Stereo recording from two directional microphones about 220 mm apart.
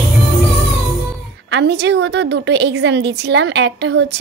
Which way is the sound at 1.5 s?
50° right (ahead or behind).